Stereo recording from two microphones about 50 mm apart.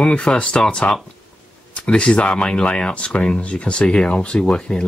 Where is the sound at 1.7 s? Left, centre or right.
Left.